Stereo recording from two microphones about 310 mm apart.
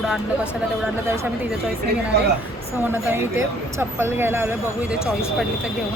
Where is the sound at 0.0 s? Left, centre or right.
Centre.